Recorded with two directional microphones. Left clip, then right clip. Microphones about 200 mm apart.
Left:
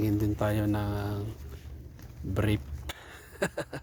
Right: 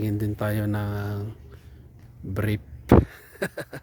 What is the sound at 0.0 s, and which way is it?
Speech, 30° right (ahead or behind).